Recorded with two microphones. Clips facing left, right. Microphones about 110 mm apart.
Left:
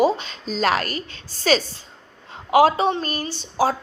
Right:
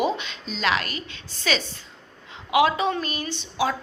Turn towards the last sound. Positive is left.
turn(degrees=40)  # may be behind; listen again after turning